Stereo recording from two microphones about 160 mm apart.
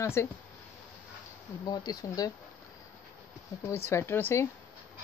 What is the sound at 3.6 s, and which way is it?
Speech, 15° left (ahead or behind).